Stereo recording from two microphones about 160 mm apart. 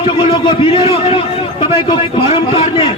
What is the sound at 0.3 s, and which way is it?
A man's voice, 35° left (ahead or behind).